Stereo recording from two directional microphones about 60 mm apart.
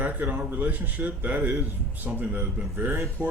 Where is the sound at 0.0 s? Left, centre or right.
Right.